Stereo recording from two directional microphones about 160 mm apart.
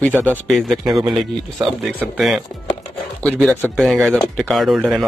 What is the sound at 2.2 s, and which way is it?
Speech, centre (ahead or behind).